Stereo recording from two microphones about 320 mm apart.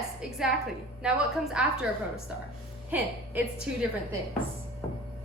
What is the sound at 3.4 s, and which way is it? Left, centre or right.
Speech, centre.